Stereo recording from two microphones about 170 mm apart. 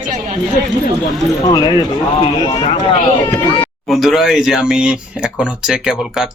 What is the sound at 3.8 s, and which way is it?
Speech, centre (ahead or behind).